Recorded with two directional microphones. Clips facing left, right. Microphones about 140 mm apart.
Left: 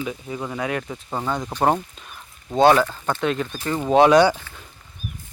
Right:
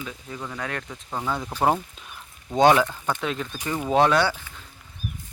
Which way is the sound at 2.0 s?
Centre (ahead or behind).